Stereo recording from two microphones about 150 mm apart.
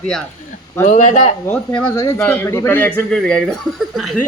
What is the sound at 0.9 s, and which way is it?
Speech, 55° left (ahead or behind).